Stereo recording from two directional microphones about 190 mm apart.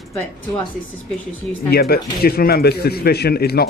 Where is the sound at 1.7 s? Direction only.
55° left (ahead or behind).